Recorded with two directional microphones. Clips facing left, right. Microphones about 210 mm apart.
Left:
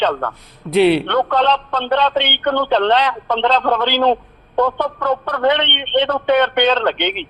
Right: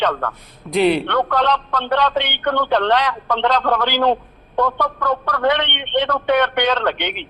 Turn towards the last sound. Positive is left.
turn(degrees=25)  # may be behind; listen again after turning